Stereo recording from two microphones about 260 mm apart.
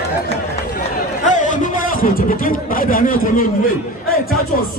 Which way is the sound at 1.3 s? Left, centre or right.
Left.